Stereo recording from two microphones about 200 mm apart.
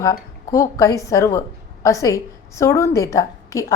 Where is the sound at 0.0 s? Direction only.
15° left (ahead or behind).